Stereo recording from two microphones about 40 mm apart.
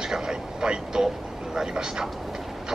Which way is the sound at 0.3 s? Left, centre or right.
Centre.